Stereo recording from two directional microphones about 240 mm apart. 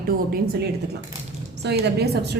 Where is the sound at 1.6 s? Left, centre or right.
Right.